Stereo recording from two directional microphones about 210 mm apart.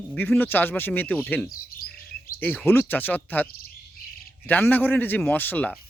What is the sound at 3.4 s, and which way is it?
Bird vocalization, 45° left (ahead or behind).